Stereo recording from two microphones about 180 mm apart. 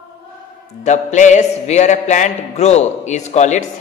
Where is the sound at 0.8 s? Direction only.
40° left (ahead or behind).